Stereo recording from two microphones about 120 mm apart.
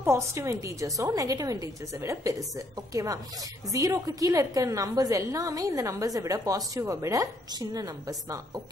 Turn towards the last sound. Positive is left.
turn(degrees=-25)  # may be behind; listen again after turning